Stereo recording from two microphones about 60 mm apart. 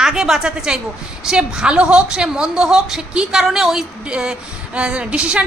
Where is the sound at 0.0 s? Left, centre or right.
Centre.